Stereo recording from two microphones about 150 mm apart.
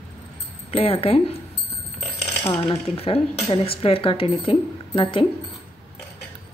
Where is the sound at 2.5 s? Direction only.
35° left (ahead or behind).